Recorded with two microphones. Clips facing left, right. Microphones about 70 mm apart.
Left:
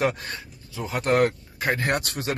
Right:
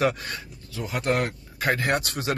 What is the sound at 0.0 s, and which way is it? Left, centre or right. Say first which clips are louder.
Speech: right 1 dB; left.